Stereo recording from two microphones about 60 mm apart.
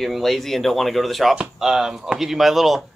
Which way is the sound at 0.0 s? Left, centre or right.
Centre.